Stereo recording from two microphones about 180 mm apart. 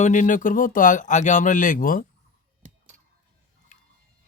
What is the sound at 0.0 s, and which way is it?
Speech, 45° left (ahead or behind).